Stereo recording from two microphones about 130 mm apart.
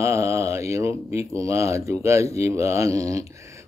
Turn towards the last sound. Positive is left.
turn(degrees=-25)  # may be behind; listen again after turning